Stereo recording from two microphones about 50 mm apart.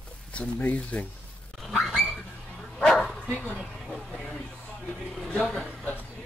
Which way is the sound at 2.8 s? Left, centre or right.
Centre.